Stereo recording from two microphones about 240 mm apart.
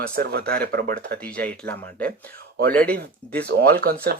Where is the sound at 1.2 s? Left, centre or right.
Centre.